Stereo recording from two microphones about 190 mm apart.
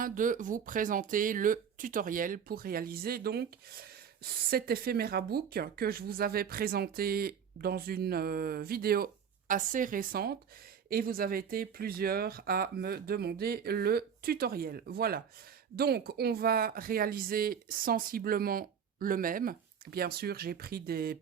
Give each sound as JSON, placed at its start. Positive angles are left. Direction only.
{"t": 0.0, "sound": "speech", "side_deg": -45}